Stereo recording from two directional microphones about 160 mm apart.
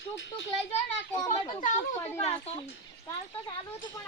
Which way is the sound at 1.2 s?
20° left (ahead or behind).